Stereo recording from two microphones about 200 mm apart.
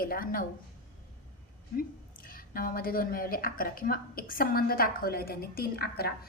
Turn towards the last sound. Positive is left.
turn(degrees=50)  # may be behind; listen again after turning